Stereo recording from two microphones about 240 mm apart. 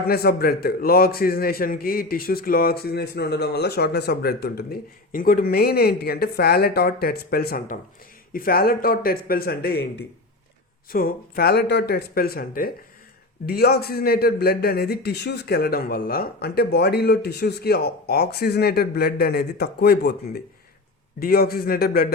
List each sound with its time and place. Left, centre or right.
0.1 s a man's voice: left
10.9 s a man's voice: left